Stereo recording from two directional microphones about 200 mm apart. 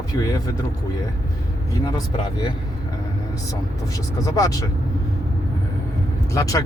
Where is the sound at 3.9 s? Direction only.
15° left (ahead or behind).